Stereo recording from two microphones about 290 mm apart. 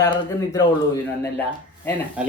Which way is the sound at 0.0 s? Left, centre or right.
Centre.